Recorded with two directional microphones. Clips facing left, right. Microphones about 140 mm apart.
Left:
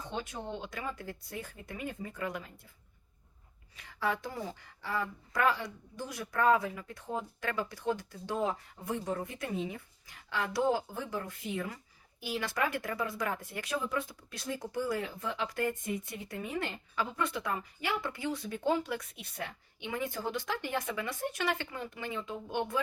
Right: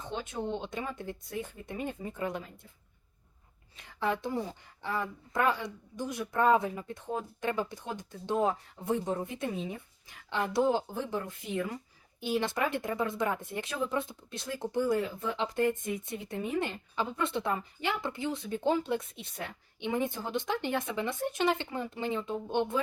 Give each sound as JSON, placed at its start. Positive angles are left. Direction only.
{"t": 0.0, "sound": "speech", "side_deg": -25}
{"t": 3.8, "sound": "speech", "side_deg": -25}